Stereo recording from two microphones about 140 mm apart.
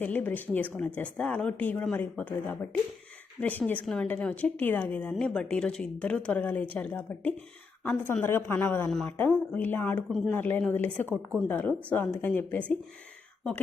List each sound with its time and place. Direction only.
0.0 s a woman's voice: 15° left (ahead or behind)
3.7 s a woman's voice: 10° left (ahead or behind)